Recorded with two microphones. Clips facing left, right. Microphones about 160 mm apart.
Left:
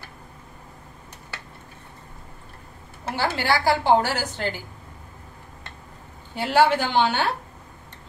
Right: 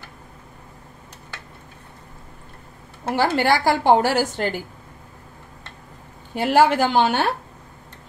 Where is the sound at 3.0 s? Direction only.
50° right (ahead or behind).